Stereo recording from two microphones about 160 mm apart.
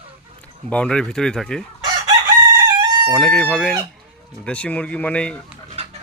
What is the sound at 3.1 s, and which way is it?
Speech, 5° left (ahead or behind).